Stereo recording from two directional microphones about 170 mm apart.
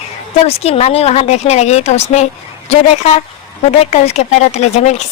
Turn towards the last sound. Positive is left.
turn(degrees=40)  # may be behind; listen again after turning